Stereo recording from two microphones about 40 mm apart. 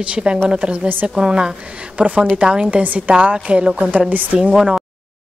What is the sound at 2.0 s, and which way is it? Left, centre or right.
Speech, right.